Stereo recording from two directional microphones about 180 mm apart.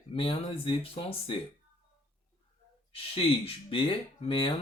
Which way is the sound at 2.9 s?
30° left (ahead or behind).